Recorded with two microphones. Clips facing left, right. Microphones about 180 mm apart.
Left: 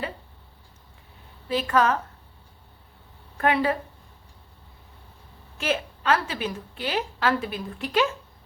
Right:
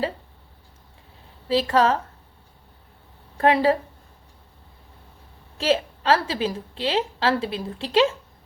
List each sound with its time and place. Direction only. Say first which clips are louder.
1.5 s a woman's voice: right 3 dB; 30° right (ahead or behind)
3.3 s speech: right 4 dB; 30° right (ahead or behind)
5.5 s a woman's voice: right 5 dB; 30° right (ahead or behind)